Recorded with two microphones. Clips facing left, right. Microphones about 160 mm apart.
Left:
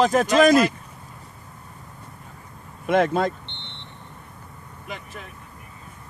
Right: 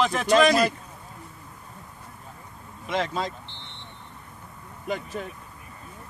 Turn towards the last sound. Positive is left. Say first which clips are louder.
# right 6 dB
turn(degrees=-40)  # may be behind; listen again after turning